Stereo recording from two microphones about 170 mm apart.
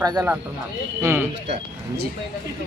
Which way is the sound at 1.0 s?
15° right (ahead or behind).